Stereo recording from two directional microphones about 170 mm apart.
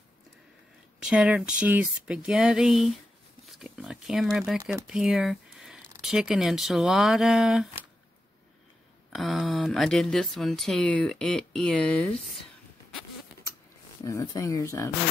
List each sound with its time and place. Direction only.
0.9 s speech: 5° right (ahead or behind)
9.1 s speech: centre (ahead or behind)
14.0 s speech: 20° left (ahead or behind)